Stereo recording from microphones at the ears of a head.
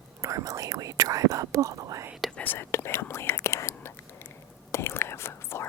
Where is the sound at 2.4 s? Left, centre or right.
Left.